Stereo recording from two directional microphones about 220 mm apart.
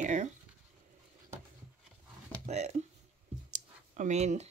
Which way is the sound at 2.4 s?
30° right (ahead or behind).